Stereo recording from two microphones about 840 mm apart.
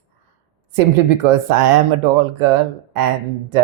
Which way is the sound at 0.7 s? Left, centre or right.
Right.